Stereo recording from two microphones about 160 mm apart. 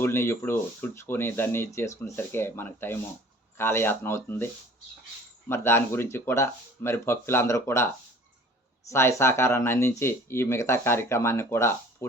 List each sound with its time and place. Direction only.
0.0 s speech: 15° left (ahead or behind)
5.5 s speech: 15° left (ahead or behind)
8.9 s speech: 15° left (ahead or behind)